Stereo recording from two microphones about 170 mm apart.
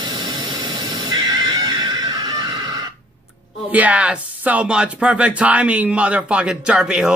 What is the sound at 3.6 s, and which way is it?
Speech, 10° right (ahead or behind).